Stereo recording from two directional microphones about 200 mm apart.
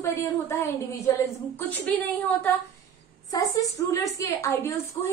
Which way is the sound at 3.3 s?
15° left (ahead or behind).